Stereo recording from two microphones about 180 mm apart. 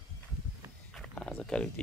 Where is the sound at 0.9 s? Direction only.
5° left (ahead or behind).